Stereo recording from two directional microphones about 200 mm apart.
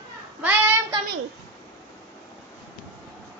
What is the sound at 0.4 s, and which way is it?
Child singing, 10° right (ahead or behind).